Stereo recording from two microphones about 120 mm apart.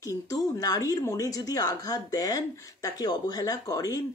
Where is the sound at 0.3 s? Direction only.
30° left (ahead or behind).